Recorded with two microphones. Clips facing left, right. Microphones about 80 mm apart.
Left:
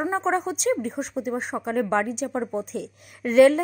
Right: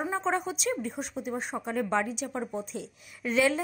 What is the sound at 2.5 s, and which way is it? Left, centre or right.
Speech, left.